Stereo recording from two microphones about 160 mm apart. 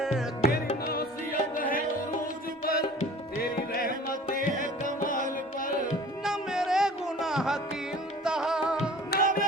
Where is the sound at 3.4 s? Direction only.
70° left (ahead or behind).